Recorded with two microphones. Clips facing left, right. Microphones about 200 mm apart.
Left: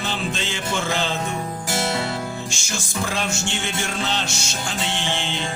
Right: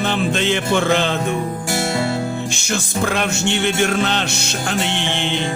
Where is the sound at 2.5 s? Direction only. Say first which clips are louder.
Right 7 dB; 60° right (ahead or behind).